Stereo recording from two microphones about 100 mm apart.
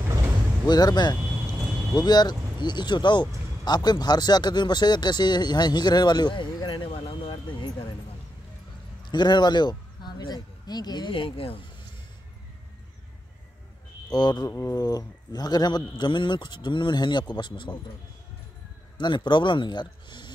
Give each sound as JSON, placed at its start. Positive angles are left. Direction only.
{"t": 0.7, "sound": "speech", "side_deg": 40}
{"t": 6.9, "sound": "a sound", "side_deg": 65}
{"t": 9.0, "sound": "speech", "side_deg": 50}
{"t": 11.1, "sound": "speech", "side_deg": 60}
{"t": 14.1, "sound": "speech", "side_deg": 40}
{"t": 18.9, "sound": "speech", "side_deg": 50}